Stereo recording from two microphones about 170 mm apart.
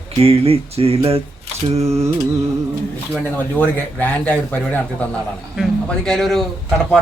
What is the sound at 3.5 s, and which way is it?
A man's voice, 10° left (ahead or behind).